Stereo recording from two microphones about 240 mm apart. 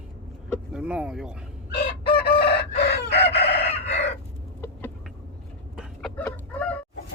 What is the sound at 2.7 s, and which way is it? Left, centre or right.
Chicken, left.